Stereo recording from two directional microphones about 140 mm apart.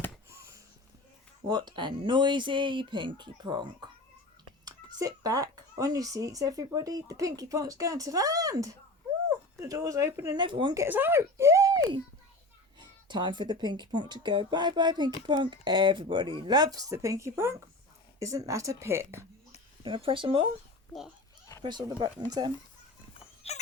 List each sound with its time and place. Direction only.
0.3 s a sound: 20° right (ahead or behind)
1.5 s speech: 30° right (ahead or behind)
10.3 s speech: 35° right (ahead or behind)
10.8 s speech: 15° right (ahead or behind)
19.8 s speech: 40° right (ahead or behind)
21.6 s speech: 30° right (ahead or behind)
23.4 s a sound: 45° left (ahead or behind)